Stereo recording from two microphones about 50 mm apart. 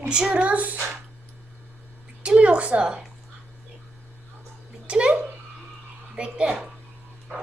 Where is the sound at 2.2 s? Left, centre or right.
Right.